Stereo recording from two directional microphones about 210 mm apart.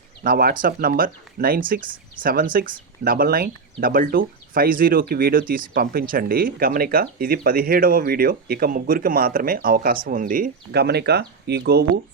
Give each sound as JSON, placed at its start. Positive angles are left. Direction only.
{"t": 0.3, "sound": "speech", "side_deg": -45}